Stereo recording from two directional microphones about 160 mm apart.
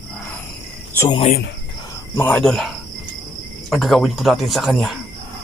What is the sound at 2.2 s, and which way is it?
Speech, 10° left (ahead or behind).